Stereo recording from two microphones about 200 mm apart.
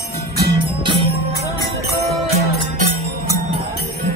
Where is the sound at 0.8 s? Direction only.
25° right (ahead or behind).